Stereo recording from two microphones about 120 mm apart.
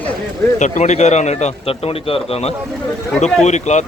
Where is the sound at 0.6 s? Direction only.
80° left; by 2.5 s 55° left (ahead or behind).